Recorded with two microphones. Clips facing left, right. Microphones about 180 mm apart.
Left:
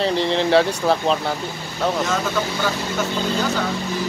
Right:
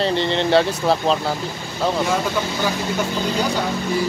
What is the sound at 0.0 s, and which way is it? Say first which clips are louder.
Speech: even; centre (ahead or behind).